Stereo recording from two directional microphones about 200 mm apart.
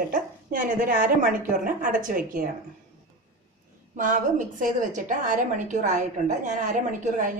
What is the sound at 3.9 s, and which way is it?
A woman's voice, 40° right (ahead or behind).